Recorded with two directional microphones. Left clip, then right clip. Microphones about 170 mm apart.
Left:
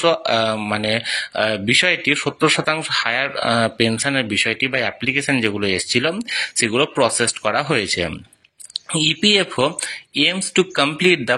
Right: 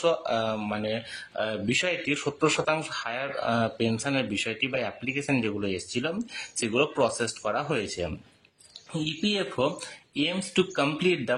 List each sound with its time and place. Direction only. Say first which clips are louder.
0.0 s speech: left 9 dB; 25° left (ahead or behind)
9.2 s speech: left 9 dB; 30° left (ahead or behind)